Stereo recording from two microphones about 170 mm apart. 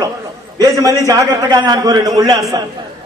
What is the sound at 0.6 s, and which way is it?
A man's voice, 20° right (ahead or behind).